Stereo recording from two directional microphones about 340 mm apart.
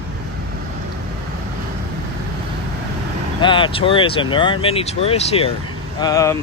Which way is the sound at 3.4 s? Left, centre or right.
Centre.